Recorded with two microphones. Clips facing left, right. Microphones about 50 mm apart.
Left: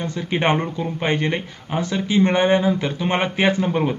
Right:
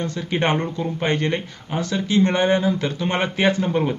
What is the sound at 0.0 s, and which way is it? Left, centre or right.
Speech, centre.